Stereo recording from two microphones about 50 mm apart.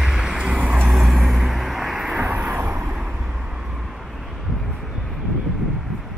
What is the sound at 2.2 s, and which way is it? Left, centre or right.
Vehicle, right.